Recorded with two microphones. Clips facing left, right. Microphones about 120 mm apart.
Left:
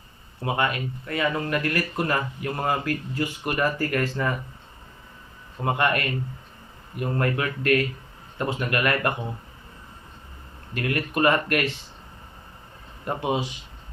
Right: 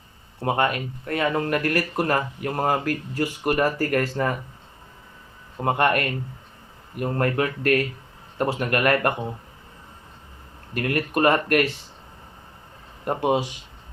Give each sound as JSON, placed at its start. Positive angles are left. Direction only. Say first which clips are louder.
{"t": 0.4, "sound": "speech", "louder": "right 3 dB", "side_deg": -45}
{"t": 5.6, "sound": "speech", "louder": "right 3 dB", "side_deg": -45}
{"t": 10.8, "sound": "speech", "louder": "right 2 dB", "side_deg": -45}
{"t": 13.1, "sound": "speech", "louder": "right 4 dB", "side_deg": -50}